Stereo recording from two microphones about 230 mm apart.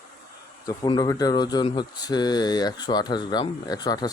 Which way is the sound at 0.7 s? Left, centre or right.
Centre.